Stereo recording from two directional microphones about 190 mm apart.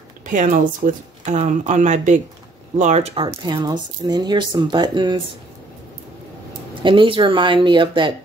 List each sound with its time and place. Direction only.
0.3 s speech: 45° right (ahead or behind)
3.3 s speech: 20° right (ahead or behind)
6.8 s speech: 25° right (ahead or behind)